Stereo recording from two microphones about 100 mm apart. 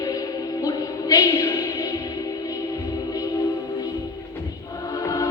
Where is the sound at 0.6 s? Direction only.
35° left (ahead or behind).